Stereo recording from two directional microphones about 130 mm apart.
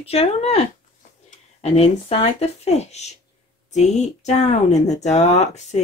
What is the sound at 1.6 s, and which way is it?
Speech, 55° left (ahead or behind).